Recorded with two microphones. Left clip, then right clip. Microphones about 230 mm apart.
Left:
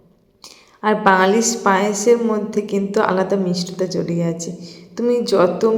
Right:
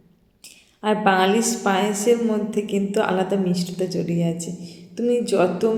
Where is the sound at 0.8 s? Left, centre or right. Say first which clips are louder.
Left 4 dB; centre.